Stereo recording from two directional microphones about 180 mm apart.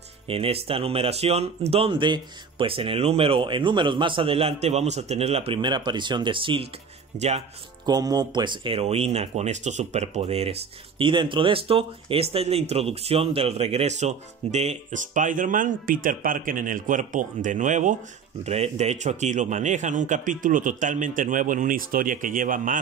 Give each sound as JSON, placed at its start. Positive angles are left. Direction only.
{"t": 0.3, "sound": "speech", "side_deg": -30}
{"t": 7.8, "sound": "a man's voice", "side_deg": -20}